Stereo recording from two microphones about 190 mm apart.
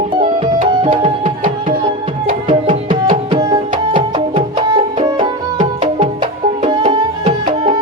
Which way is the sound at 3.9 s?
25° right (ahead or behind).